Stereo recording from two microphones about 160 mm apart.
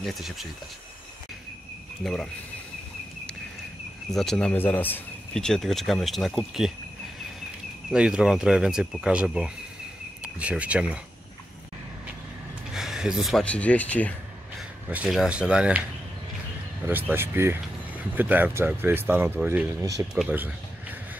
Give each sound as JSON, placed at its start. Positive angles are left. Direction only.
{"t": 0.0, "sound": "speech", "side_deg": 0}
{"t": 4.1, "sound": "speech", "side_deg": 0}
{"t": 7.9, "sound": "speech", "side_deg": -5}
{"t": 12.7, "sound": "speech", "side_deg": 0}
{"t": 14.9, "sound": "speech", "side_deg": -5}
{"t": 16.8, "sound": "speech", "side_deg": -15}
{"t": 20.2, "sound": "speech", "side_deg": -10}